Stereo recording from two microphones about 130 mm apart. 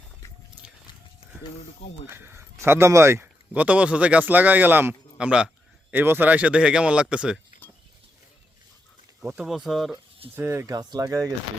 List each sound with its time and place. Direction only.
2.0 s speech: 15° right (ahead or behind)
9.3 s speech: 5° right (ahead or behind)
10.3 s speech: 20° right (ahead or behind)